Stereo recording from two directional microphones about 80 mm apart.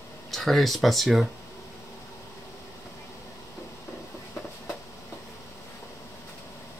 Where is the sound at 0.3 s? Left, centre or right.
Centre.